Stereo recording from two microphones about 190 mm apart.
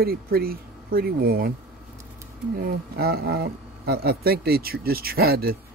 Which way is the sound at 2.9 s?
55° right (ahead or behind).